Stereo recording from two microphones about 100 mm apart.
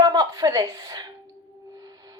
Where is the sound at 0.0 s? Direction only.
40° right (ahead or behind).